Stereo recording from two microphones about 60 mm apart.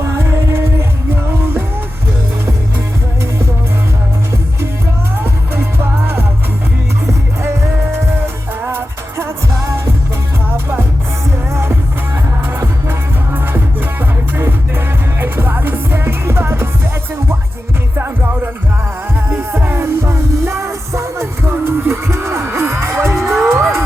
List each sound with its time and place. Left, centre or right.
0.0 s music: right
8.6 s music: right
9.6 s music: right
11.5 s music: right
15.2 s music: right
17.9 s music: right
23.1 s music: centre
23.4 s music: right